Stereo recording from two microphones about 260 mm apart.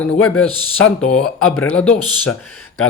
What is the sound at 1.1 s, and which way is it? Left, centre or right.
Speech, centre.